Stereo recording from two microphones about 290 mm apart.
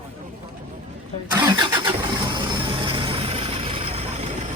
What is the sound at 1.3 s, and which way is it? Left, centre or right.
Vehicle, centre.